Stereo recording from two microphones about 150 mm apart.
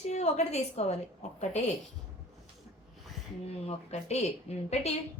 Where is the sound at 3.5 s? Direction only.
45° left (ahead or behind).